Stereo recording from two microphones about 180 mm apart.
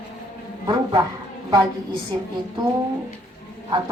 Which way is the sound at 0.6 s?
25° right (ahead or behind).